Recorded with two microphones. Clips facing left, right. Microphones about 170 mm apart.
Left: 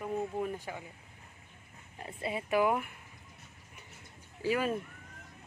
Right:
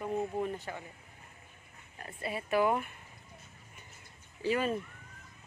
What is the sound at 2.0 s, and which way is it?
Speech, 20° left (ahead or behind).